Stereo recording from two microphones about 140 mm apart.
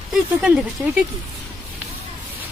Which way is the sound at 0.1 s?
10° right (ahead or behind).